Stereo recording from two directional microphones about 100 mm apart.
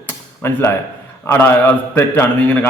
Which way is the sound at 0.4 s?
25° left (ahead or behind).